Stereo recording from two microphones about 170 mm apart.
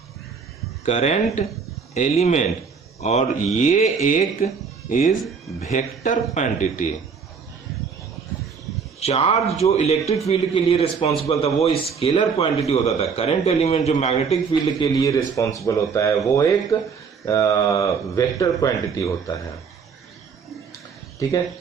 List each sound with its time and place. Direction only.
0.9 s speech: 40° left (ahead or behind)
9.0 s speech: 35° left (ahead or behind)
14.8 s speech: 20° left (ahead or behind)
21.2 s speech: 20° left (ahead or behind)